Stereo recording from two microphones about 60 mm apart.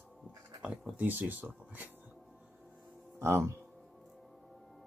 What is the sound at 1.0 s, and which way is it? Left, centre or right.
Speech, right.